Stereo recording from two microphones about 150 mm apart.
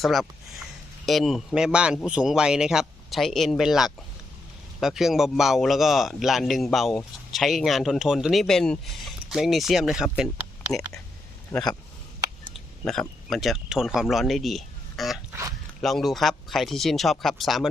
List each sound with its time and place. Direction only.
0.0 s a man's voice: centre (ahead or behind)
11.5 s a man's voice: 20° left (ahead or behind)
12.8 s speech: 5° left (ahead or behind)
15.3 s speech: 20° right (ahead or behind)
15.8 s a man's voice: centre (ahead or behind)